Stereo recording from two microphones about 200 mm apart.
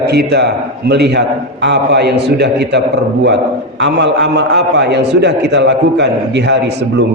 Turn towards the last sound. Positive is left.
turn(degrees=-60)  # may be behind; listen again after turning